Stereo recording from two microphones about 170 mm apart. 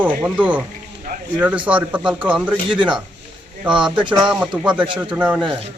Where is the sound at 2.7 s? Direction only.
30° right (ahead or behind).